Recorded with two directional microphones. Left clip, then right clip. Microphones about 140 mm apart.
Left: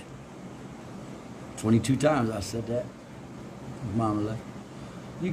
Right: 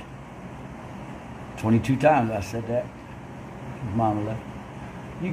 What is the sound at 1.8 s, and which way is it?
Speech, 20° left (ahead or behind).